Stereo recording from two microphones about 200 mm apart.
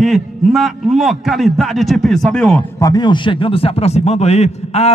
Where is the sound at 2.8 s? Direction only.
20° left (ahead or behind).